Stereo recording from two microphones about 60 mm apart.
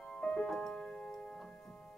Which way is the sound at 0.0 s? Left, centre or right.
Centre.